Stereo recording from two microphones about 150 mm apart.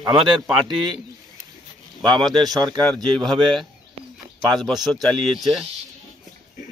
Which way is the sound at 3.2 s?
Centre (ahead or behind).